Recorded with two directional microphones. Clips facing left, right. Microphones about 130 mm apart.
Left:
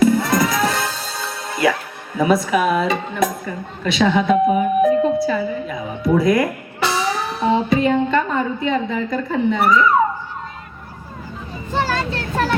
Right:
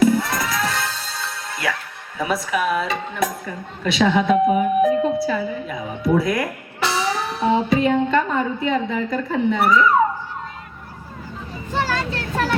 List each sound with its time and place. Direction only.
0.0 s music: 5° right (ahead or behind)
0.3 s music: 15° left (ahead or behind)
2.2 s speech: centre (ahead or behind)
11.7 s a child's voice: 30° left (ahead or behind)